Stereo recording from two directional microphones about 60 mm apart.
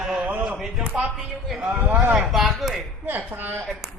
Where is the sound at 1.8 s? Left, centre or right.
Right.